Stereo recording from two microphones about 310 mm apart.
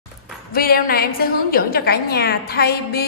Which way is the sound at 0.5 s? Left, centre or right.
Left.